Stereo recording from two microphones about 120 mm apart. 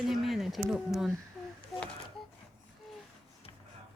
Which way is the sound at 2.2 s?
5° left (ahead or behind).